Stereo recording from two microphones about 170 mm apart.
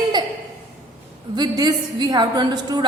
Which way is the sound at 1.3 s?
25° right (ahead or behind).